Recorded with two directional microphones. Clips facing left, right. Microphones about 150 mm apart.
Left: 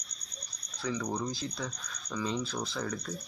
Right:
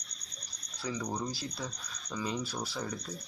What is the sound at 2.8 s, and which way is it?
Speech, 20° right (ahead or behind).